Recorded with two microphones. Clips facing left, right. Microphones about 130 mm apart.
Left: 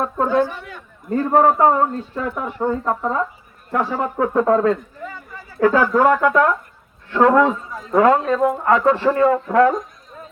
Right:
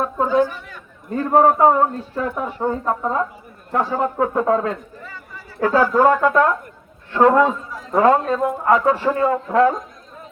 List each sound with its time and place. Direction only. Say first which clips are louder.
0.0 s speech: even; 10° right (ahead or behind)
0.7 s a man's voice: left 4 dB; 5° left (ahead or behind)
1.5 s speech: right 1 dB; 15° right (ahead or behind)
3.7 s speech: right 1 dB; 20° right (ahead or behind)
5.8 s speech: even; 15° right (ahead or behind)
8.4 s speech: left 1 dB; 10° right (ahead or behind)